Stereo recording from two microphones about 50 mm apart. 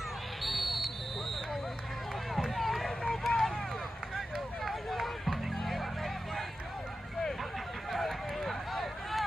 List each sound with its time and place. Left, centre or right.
0.4 s basketball bounce: centre
2.5 s run: centre
3.3 s vehicle: centre
4.6 s music: centre
7.9 s a sound: centre